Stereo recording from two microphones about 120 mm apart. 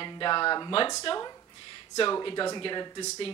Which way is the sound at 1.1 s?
50° left (ahead or behind).